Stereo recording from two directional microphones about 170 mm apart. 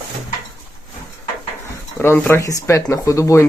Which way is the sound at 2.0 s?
10° left (ahead or behind).